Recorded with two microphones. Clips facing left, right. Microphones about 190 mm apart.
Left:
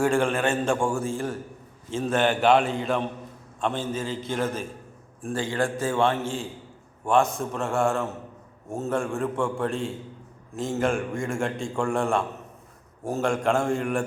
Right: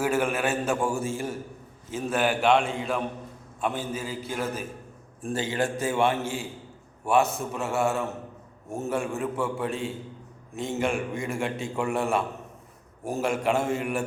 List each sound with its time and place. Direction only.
0.0 s a man's voice: 5° right (ahead or behind)
5.4 s a man's voice: 20° right (ahead or behind)
5.8 s a man's voice: 10° right (ahead or behind)